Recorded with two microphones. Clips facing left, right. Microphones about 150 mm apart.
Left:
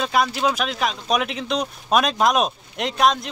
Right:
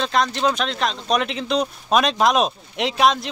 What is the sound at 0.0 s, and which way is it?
Speech, 5° left (ahead or behind).